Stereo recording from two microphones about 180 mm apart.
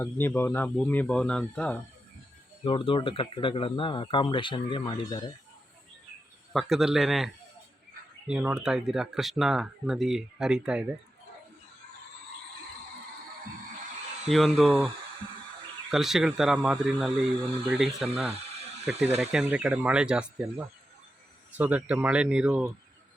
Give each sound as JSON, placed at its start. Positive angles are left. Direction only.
{"t": 0.0, "sound": "speech", "side_deg": 10}
{"t": 2.6, "sound": "speech", "side_deg": 30}
{"t": 6.5, "sound": "speech", "side_deg": 0}
{"t": 8.3, "sound": "speech", "side_deg": -5}
{"t": 14.3, "sound": "speech", "side_deg": 0}
{"t": 15.9, "sound": "speech", "side_deg": 0}